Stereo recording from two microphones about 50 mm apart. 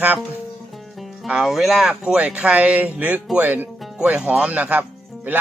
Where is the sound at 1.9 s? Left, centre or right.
Right.